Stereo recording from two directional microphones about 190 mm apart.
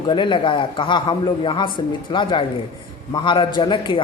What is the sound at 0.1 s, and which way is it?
A man's voice, 25° left (ahead or behind).